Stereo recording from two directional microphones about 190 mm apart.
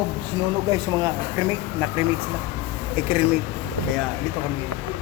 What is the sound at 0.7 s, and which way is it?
A man's voice, 20° right (ahead or behind).